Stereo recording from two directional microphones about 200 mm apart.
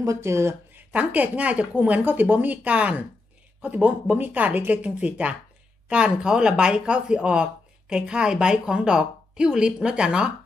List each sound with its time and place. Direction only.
0.0 s a woman's voice: 15° right (ahead or behind)